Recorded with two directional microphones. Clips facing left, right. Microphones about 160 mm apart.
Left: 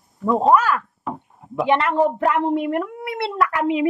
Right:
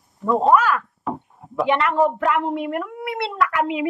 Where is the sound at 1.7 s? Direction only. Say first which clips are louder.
Left 1 dB; 30° left (ahead or behind).